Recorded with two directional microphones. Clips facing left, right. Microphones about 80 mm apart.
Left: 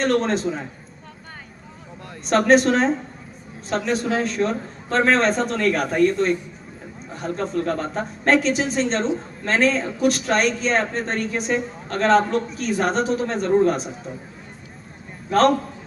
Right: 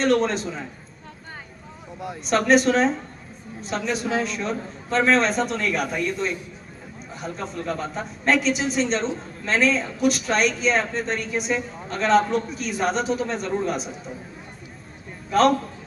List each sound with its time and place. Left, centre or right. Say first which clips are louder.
0.0 s a man's voice: left 1 dB; left
2.2 s a man's voice: left 2 dB; left
7.3 s a man's voice: left 6 dB; left
15.3 s a man's voice: left 1 dB; left